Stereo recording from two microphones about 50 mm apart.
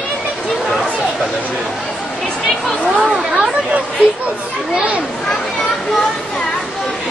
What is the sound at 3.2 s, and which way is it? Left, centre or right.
Chatter, centre.